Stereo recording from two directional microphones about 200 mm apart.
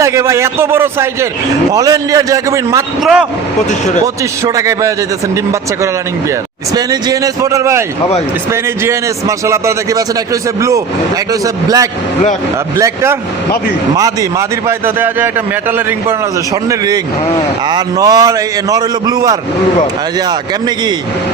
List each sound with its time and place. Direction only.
0.0 s a man's voice: 15° right (ahead or behind)
3.0 s speech: 5° right (ahead or behind)
4.0 s a man's voice: 15° right (ahead or behind)
6.7 s a man's voice: 20° right (ahead or behind)
16.6 s a man's voice: 20° right (ahead or behind)